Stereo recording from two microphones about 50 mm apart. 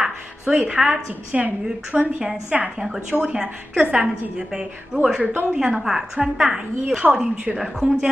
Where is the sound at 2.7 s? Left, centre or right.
Centre.